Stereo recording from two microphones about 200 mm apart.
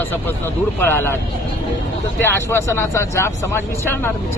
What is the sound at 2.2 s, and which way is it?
Speech, 15° left (ahead or behind).